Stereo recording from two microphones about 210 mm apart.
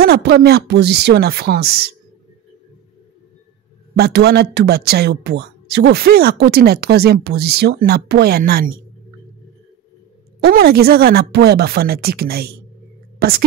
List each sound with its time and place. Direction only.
0.0 s a man's voice: 50° right (ahead or behind)
3.9 s a man's voice: 50° right (ahead or behind)
10.4 s a man's voice: 50° right (ahead or behind)